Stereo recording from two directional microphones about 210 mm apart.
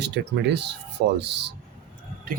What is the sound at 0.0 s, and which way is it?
Speech, 55° right (ahead or behind).